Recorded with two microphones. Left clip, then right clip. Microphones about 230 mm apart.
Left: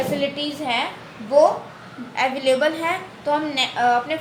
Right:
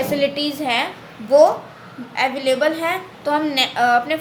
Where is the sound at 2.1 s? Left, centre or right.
Centre.